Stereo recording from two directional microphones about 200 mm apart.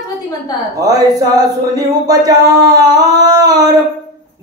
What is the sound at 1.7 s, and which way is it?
Mantra, 20° right (ahead or behind).